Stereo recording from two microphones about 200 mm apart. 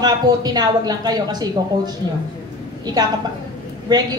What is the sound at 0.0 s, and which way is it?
A woman's voice, 20° right (ahead or behind).